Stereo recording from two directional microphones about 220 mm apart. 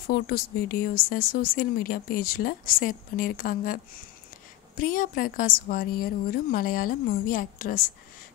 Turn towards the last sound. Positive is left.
turn(degrees=40)  # may be behind; listen again after turning